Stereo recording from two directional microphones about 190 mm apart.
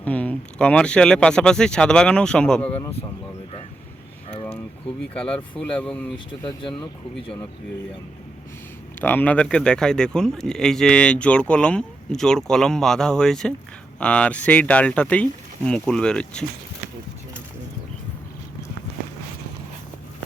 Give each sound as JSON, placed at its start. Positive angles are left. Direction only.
{"t": 0.0, "sound": "speech", "side_deg": 5}
{"t": 5.1, "sound": "speech", "side_deg": 5}
{"t": 6.1, "sound": "speech", "side_deg": 25}
{"t": 9.0, "sound": "speech", "side_deg": 10}